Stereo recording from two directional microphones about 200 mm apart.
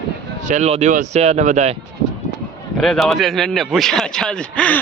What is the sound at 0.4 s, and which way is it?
Speech, 35° right (ahead or behind).